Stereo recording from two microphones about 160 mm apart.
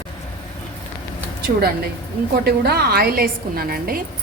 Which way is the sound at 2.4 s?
80° right.